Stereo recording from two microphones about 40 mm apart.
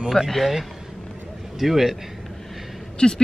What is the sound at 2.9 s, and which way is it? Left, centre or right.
Speech, centre.